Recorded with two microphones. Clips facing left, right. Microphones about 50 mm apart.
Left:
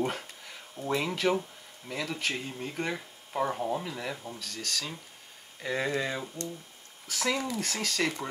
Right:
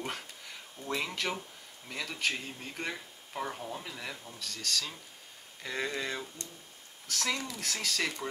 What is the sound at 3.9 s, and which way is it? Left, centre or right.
Speech, centre.